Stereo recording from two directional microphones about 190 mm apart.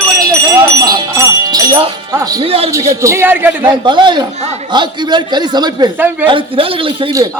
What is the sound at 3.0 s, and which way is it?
Speech, 10° right (ahead or behind).